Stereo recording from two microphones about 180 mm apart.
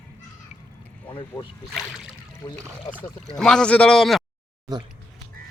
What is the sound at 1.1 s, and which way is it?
Boat, 30° left (ahead or behind).